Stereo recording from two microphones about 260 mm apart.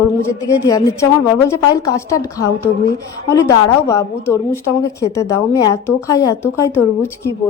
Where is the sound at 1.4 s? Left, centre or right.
Centre.